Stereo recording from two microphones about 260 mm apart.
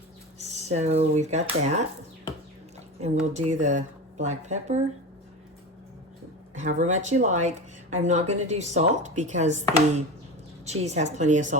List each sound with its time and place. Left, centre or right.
0.5 s speech: right
3.0 s speech: right
6.6 s speech: right